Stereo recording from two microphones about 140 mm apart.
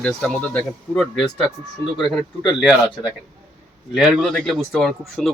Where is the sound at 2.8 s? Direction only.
35° left (ahead or behind).